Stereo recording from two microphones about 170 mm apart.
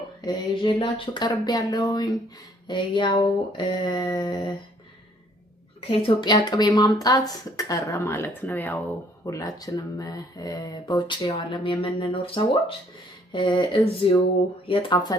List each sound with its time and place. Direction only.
0.2 s speech: 25° left (ahead or behind)
5.9 s speech: 30° left (ahead or behind)